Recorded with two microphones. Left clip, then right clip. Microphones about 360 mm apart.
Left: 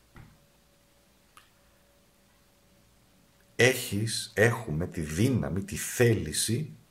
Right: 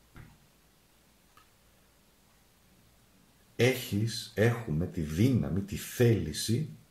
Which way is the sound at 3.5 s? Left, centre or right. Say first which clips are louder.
Left 4 dB; centre.